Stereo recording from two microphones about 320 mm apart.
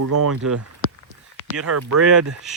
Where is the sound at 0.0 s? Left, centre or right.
Right.